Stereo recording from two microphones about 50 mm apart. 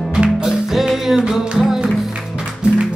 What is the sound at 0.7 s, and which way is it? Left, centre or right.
Music, centre.